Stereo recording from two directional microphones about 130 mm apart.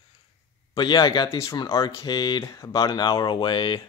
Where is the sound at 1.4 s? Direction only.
25° left (ahead or behind).